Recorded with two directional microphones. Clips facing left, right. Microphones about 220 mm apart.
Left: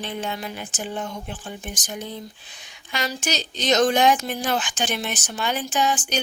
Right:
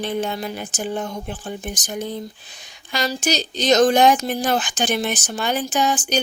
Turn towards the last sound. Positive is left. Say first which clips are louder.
# right 3 dB
turn(degrees=-40)  # may be behind; listen again after turning